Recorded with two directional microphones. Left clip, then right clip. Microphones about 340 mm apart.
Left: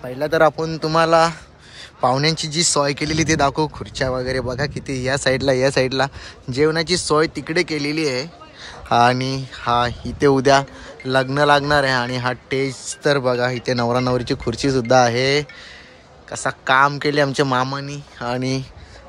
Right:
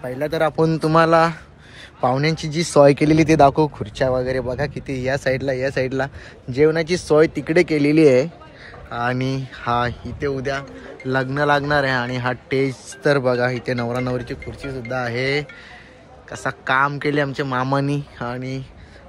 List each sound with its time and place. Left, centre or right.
0.2 s speech: centre
0.6 s speech: centre
16.4 s speech: centre
18.3 s speech: centre